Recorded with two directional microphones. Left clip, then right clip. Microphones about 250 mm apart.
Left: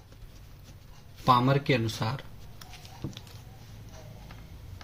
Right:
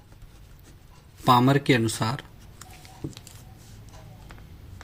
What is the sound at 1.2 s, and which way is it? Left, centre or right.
Speech, right.